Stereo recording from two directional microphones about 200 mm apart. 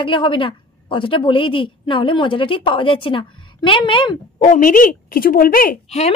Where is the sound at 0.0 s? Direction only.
25° left (ahead or behind).